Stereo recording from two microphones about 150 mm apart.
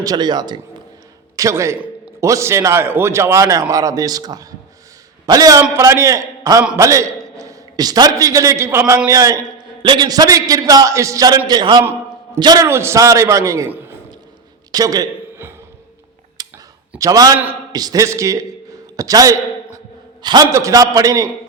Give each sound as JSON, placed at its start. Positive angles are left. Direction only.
{"t": 0.0, "sound": "a man's voice", "side_deg": -25}
{"t": 11.8, "sound": "a sound", "side_deg": -15}
{"t": 12.4, "sound": "a man's voice", "side_deg": -25}
{"t": 14.7, "sound": "a sound", "side_deg": -25}
{"t": 16.4, "sound": "clicking", "side_deg": -25}
{"t": 17.0, "sound": "a man's voice", "side_deg": -25}